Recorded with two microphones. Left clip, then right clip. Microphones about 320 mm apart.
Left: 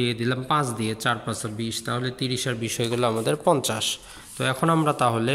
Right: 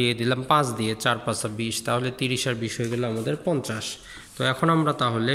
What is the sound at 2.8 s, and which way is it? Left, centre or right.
A man's voice, centre.